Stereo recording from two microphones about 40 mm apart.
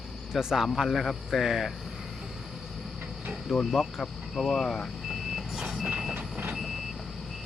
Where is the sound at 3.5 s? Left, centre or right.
Centre.